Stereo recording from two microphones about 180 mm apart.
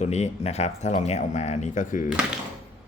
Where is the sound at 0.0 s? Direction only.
40° left (ahead or behind).